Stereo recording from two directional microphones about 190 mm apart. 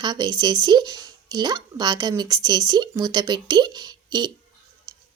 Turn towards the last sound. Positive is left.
turn(degrees=-20)  # may be behind; listen again after turning